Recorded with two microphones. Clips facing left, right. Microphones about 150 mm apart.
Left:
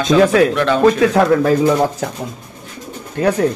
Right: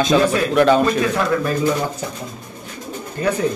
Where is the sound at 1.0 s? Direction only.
90° left.